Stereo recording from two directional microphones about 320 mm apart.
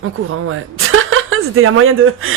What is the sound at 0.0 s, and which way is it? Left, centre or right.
A woman's voice, right.